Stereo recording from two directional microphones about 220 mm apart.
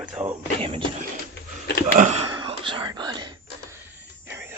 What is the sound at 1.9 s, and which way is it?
Speech, 30° right (ahead or behind).